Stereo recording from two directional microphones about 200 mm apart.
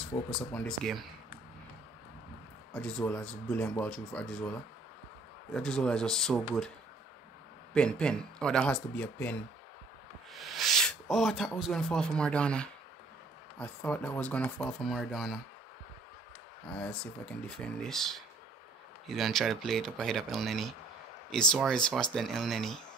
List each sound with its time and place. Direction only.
0.6 s speech: centre (ahead or behind)
2.7 s speech: 5° left (ahead or behind)
5.5 s speech: 5° left (ahead or behind)
7.7 s speech: 5° left (ahead or behind)
16.7 s speech: 5° left (ahead or behind)